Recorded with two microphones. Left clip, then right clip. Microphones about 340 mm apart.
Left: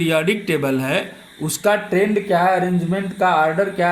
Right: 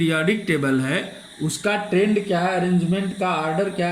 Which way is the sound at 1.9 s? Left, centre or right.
Left.